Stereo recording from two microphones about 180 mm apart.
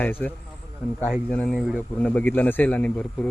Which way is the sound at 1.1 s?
5° left (ahead or behind).